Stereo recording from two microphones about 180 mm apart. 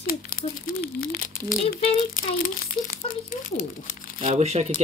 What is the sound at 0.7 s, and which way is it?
Speech, 55° left (ahead or behind).